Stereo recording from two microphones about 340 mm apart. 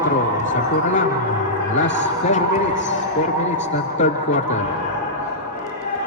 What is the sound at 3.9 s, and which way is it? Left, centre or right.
Speech, left.